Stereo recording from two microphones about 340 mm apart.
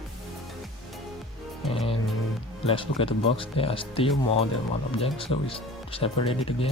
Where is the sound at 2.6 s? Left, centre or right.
Centre.